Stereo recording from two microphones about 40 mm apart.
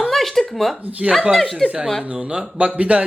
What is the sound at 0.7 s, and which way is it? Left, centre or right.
Speech, right.